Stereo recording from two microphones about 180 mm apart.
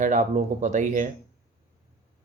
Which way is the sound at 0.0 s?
45° right (ahead or behind).